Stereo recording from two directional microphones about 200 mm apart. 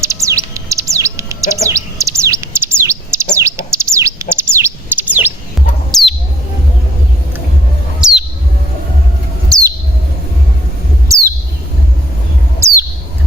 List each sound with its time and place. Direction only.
0.0 s bird: 15° right (ahead or behind)
8.0 s chirp: centre (ahead or behind)
11.1 s bird: 15° right (ahead or behind)
12.5 s bird: 15° right (ahead or behind)